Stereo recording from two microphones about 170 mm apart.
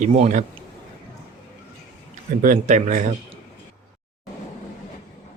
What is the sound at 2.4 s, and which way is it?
Speech, 50° right (ahead or behind).